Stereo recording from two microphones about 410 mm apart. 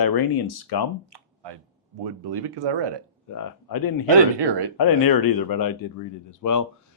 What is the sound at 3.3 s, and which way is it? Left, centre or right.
Speech, left.